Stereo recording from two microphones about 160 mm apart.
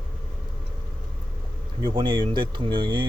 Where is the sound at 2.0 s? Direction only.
30° right (ahead or behind).